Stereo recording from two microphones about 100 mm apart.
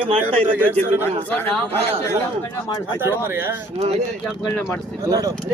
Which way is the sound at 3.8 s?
90° right.